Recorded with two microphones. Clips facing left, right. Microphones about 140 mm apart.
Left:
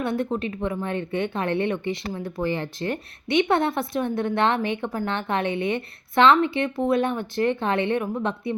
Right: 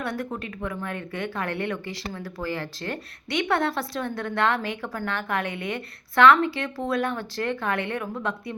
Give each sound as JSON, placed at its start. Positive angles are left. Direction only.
{"t": 0.0, "sound": "speech", "side_deg": 25}